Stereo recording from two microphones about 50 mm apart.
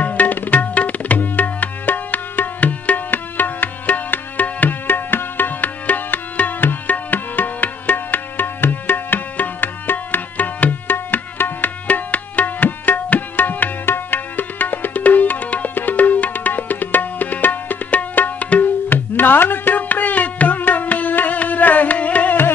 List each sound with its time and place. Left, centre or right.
0.0 s tabla: left